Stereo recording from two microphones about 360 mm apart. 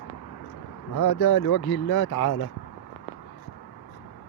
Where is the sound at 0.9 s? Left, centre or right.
Left.